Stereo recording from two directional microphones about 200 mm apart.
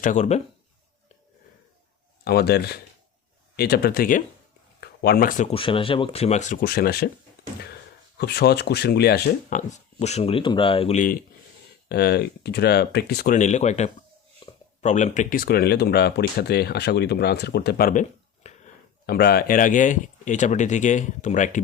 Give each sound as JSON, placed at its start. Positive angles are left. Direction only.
{"t": 0.0, "sound": "speech", "side_deg": 35}
{"t": 2.2, "sound": "speech", "side_deg": 55}
{"t": 8.2, "sound": "speech", "side_deg": 55}
{"t": 9.6, "sound": "speech", "side_deg": 35}
{"t": 11.9, "sound": "speech", "side_deg": 55}
{"t": 13.3, "sound": "speech", "side_deg": 35}
{"t": 14.4, "sound": "a sound", "side_deg": 25}
{"t": 14.8, "sound": "speech", "side_deg": 35}
{"t": 18.4, "sound": "a sound", "side_deg": 35}
{"t": 19.0, "sound": "speech", "side_deg": 50}